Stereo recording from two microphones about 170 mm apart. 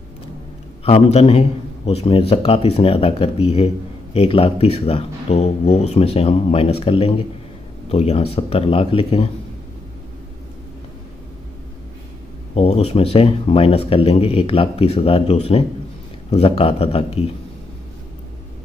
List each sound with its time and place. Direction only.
0.8 s speech: 35° left (ahead or behind)
12.5 s speech: 35° left (ahead or behind)